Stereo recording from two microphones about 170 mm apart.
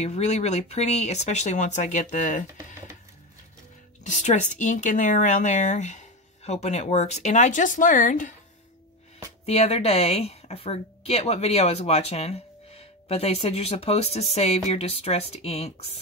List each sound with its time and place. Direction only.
0.0 s a woman's voice: 40° left (ahead or behind)
4.0 s speech: 45° left (ahead or behind)
9.5 s a woman's voice: 35° left (ahead or behind)